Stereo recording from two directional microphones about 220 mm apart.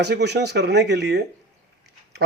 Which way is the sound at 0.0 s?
50° right (ahead or behind).